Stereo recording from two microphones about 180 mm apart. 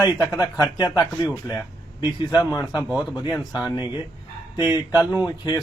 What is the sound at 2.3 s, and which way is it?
Speech, 20° left (ahead or behind).